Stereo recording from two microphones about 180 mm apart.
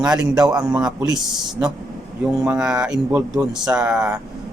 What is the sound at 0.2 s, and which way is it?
Speech, 20° right (ahead or behind).